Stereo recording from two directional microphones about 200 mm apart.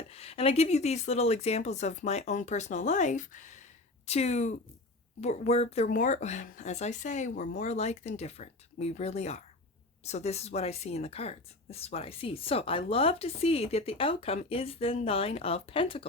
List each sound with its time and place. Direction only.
0.1 s speech: 30° left (ahead or behind)